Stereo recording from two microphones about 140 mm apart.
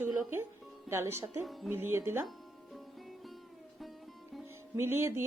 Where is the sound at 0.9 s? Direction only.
15° right (ahead or behind).